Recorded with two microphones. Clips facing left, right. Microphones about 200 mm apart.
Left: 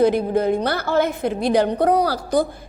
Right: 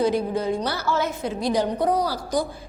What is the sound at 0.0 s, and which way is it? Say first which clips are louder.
A woman's voice: left 5 dB; 55° left (ahead or behind).